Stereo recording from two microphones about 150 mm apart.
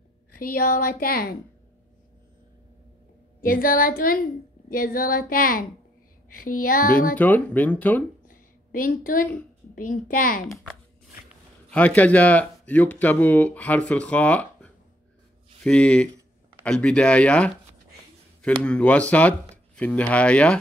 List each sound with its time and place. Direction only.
0.4 s speech: 75° left (ahead or behind)
3.3 s speech: 70° left (ahead or behind)
7.2 s speech: 10° left (ahead or behind)
8.3 s a sound: 70° left (ahead or behind)
9.8 s a woman's voice: 65° left (ahead or behind)
11.7 s speech: 10° left (ahead or behind)
18.6 s speech: 5° left (ahead or behind)